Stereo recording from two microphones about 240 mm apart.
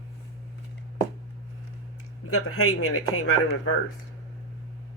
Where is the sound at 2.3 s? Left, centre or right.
Left.